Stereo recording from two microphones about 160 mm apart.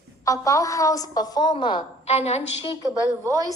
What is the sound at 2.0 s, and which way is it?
Speech, 40° left (ahead or behind).